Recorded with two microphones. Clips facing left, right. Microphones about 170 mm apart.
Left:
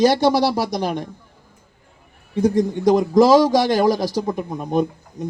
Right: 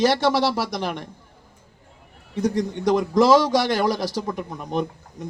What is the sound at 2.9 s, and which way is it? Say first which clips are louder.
Speech: left 3 dB; 35° left (ahead or behind).